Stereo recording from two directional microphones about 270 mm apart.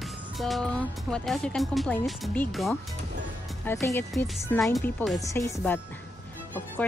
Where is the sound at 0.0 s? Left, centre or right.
Centre.